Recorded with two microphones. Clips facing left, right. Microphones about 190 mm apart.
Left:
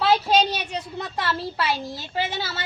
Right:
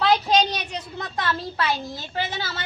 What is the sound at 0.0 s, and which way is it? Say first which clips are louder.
A child's voice: even; 5° left (ahead or behind).